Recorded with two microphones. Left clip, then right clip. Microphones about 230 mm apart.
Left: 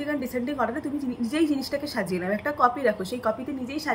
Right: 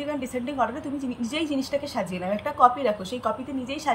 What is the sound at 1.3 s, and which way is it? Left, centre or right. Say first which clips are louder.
A woman's voice: left 2 dB; centre.